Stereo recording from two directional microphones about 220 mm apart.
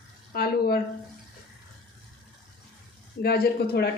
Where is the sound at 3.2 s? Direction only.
45° left (ahead or behind).